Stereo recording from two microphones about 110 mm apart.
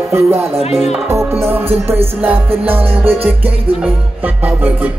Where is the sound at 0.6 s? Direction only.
75° left (ahead or behind).